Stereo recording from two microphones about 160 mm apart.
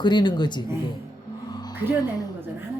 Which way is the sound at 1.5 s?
25° left (ahead or behind).